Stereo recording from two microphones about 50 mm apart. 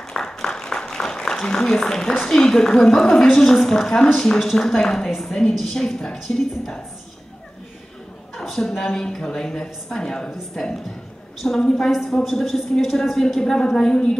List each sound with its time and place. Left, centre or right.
0.1 s a sound: centre
2.2 s a woman's voice: centre
8.5 s a woman's voice: centre
13.4 s a woman's voice: centre